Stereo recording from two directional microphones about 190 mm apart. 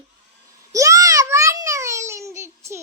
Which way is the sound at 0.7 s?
15° right (ahead or behind).